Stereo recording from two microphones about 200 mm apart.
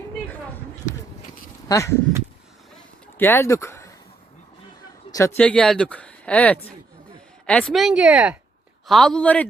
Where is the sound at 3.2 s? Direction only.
10° left (ahead or behind).